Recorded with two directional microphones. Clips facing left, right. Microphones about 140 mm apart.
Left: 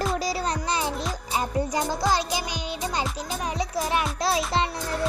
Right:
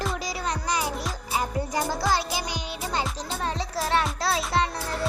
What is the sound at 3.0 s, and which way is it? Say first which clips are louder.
A child's voice: even; 10° left (ahead or behind).